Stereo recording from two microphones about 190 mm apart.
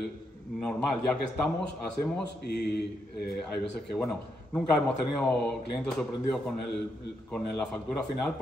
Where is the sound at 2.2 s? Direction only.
60° left (ahead or behind).